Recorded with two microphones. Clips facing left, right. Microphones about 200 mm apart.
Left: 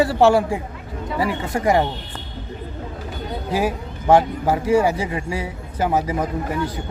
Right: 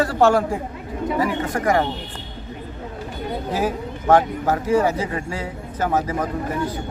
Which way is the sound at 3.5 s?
10° left (ahead or behind).